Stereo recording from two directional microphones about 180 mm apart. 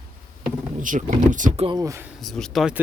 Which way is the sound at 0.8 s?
45° right (ahead or behind).